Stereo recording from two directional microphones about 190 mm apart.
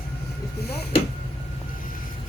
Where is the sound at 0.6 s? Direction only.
55° left (ahead or behind).